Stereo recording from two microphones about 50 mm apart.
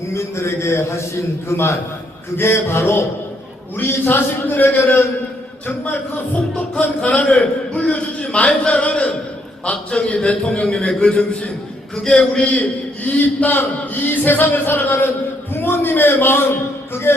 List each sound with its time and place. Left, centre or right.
0.1 s a man's voice: left
3.8 s a man's voice: left
5.8 s a man's voice: left